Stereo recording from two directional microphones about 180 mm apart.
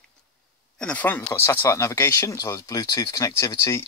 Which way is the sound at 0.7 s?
5° left (ahead or behind).